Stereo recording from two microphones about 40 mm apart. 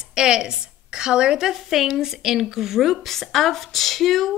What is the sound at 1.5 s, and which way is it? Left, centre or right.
A woman's voice, centre.